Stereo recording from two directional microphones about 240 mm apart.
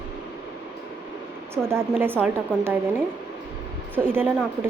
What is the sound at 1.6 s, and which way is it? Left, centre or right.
Speech, centre.